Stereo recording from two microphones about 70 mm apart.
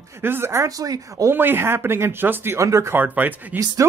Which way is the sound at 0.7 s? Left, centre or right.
Right.